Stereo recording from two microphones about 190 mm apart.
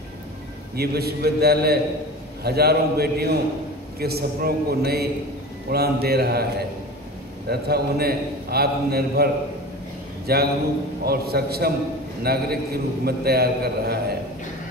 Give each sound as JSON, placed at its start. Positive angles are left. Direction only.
{"t": 0.7, "sound": "a man's voice", "side_deg": -55}
{"t": 7.4, "sound": "a man's voice", "side_deg": -55}